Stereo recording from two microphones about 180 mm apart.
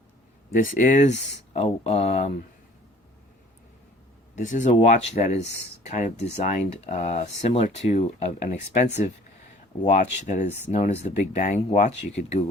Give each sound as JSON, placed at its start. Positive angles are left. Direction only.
{"t": 0.5, "sound": "speech", "side_deg": 50}
{"t": 4.4, "sound": "speech", "side_deg": 45}